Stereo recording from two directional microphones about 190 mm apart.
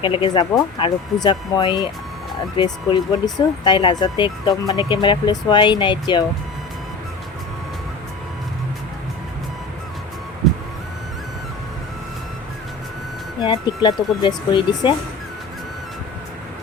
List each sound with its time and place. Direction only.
0.0 s speech: 25° left (ahead or behind)
13.4 s speech: 25° left (ahead or behind)